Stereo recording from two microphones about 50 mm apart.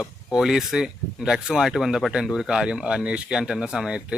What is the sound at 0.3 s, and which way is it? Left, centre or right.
Speech, centre.